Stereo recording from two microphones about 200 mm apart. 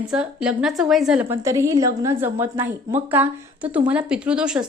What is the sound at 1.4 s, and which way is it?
A woman's voice, 15° right (ahead or behind).